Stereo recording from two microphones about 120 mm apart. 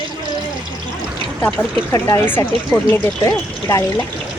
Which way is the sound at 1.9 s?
25° left (ahead or behind).